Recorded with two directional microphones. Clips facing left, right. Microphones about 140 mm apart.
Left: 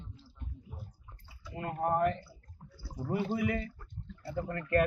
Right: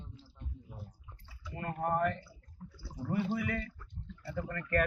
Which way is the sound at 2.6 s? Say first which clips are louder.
Right 6 dB; 30° left (ahead or behind).